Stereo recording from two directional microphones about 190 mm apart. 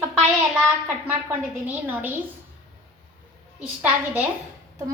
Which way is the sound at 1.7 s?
10° right (ahead or behind).